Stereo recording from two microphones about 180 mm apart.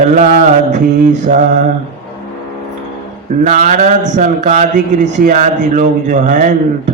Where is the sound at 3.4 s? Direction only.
45° right (ahead or behind).